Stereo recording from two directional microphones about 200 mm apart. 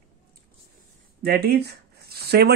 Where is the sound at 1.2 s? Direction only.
55° right (ahead or behind).